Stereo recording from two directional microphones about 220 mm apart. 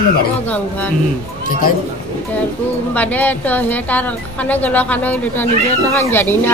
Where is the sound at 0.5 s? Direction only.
5° left (ahead or behind).